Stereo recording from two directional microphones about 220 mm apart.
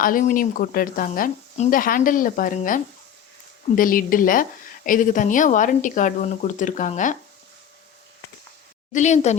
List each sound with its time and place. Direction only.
0.0 s a woman's voice: 40° left (ahead or behind)
8.9 s a woman's voice: 35° left (ahead or behind)